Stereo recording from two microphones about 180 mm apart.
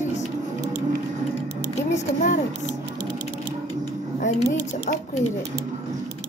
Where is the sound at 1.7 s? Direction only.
45° left (ahead or behind).